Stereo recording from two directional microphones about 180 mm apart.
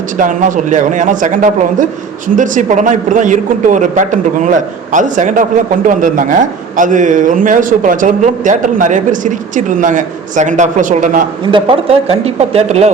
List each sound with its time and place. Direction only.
0.2 s speech: 45° right (ahead or behind)
11.5 s speech: 30° right (ahead or behind)